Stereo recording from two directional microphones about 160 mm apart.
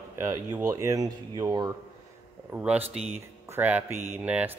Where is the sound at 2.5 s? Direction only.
10° right (ahead or behind).